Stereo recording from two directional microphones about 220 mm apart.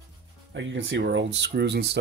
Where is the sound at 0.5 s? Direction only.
55° right (ahead or behind).